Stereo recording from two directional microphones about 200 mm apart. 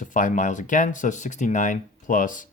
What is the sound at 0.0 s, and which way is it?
Speech, 40° left (ahead or behind).